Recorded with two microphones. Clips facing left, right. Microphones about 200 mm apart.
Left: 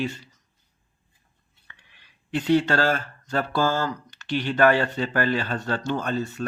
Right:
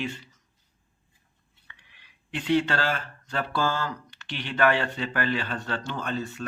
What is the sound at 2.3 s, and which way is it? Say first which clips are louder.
Speech: left 4 dB; 40° left (ahead or behind).